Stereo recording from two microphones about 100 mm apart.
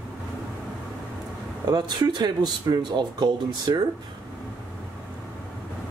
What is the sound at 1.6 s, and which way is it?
Speech, 45° right (ahead or behind).